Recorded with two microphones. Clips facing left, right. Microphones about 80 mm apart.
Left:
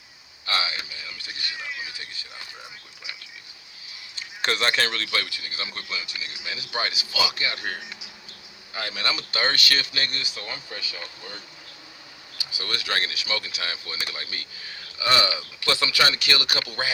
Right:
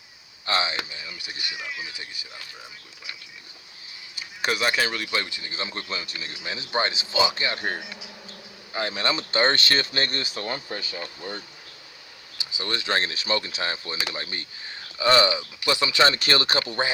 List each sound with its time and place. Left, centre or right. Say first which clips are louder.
0.4 s speech: right 2 dB; right
1.5 s speech: left 1 dB; centre
1.9 s speech: even; centre
4.1 s speech: even; centre; by 11.3 s right
12.4 s speech: right 2 dB; right